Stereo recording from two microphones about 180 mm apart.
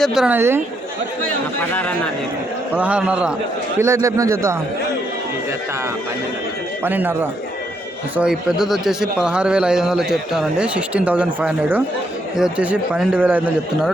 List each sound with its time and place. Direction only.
0.0 s a man's voice: centre (ahead or behind)
0.3 s a man's voice: 15° right (ahead or behind)
2.7 s a man's voice: 5° right (ahead or behind)
6.8 s a man's voice: 10° right (ahead or behind)